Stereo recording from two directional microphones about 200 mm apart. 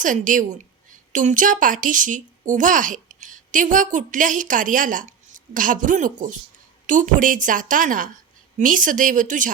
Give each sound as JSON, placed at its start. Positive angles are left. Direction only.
{"t": 0.0, "sound": "a woman's voice", "side_deg": -40}